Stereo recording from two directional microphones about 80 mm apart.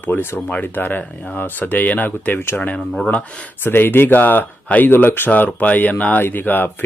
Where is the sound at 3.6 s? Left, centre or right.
Left.